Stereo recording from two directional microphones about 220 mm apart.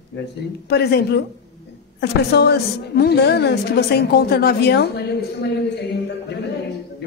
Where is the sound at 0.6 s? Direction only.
50° left (ahead or behind).